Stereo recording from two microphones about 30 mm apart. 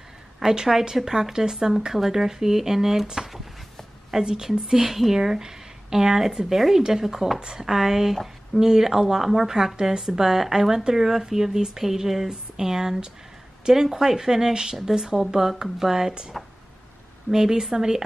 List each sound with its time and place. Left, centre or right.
0.4 s speech: centre
4.2 s a woman's voice: right
9.2 s speech: centre
9.8 s a woman's voice: centre